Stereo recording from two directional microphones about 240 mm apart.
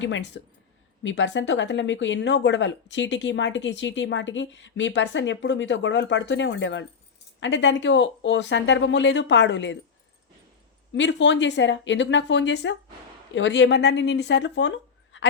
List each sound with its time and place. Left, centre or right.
0.0 s speech: left
10.9 s speech: left